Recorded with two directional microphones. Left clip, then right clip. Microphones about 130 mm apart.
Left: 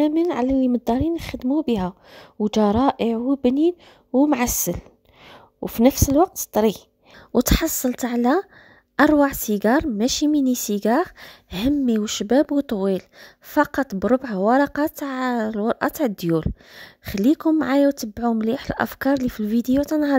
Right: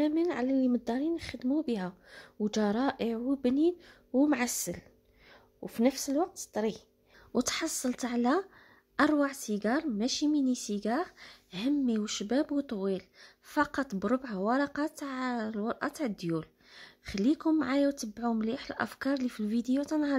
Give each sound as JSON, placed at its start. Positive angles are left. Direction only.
{"t": 0.0, "sound": "a woman's voice", "side_deg": 60}
{"t": 7.3, "sound": "a woman's voice", "side_deg": 65}